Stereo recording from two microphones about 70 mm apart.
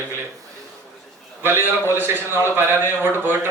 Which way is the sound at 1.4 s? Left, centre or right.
Right.